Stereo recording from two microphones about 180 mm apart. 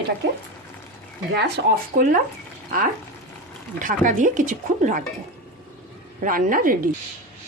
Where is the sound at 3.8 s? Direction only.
45° right (ahead or behind).